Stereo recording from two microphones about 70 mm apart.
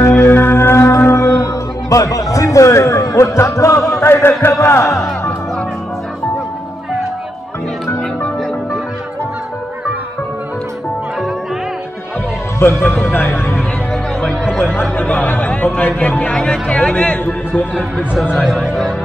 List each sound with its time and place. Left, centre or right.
0.1 s music: left
4.0 s chant: left
4.6 s speech: left
12.5 s speech: left
14.5 s speech: centre
15.1 s speech: left
17.2 s speech: left
18.3 s speech: centre